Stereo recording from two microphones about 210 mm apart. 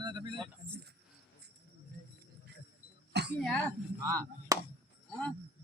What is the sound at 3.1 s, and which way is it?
Throat clearing, 55° right (ahead or behind).